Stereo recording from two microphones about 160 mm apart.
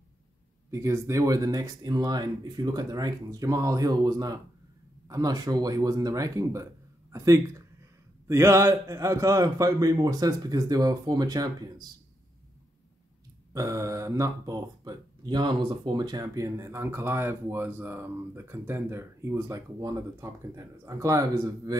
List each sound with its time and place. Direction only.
0.7 s speech: 20° right (ahead or behind)
13.5 s speech: 20° right (ahead or behind)